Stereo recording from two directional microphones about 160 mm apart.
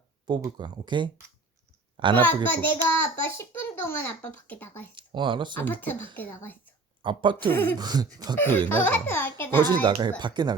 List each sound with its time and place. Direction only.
0.3 s a woman's voice: 25° right (ahead or behind)
2.2 s a child's voice: 10° left (ahead or behind)
4.9 s speech: 30° right (ahead or behind)
5.5 s a child's voice: 10° left (ahead or behind)
7.0 s speech: 30° right (ahead or behind)
7.5 s a child's voice: 10° left (ahead or behind)
7.8 s speech: 25° right (ahead or behind)
8.4 s a child's voice: 10° left (ahead or behind)
9.8 s speech: 30° right (ahead or behind)